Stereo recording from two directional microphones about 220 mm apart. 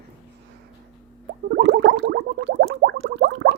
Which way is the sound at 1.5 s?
55° right (ahead or behind).